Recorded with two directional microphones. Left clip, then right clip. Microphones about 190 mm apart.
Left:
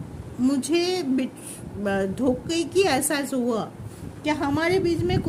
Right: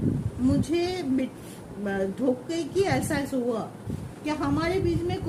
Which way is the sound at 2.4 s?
60° left (ahead or behind).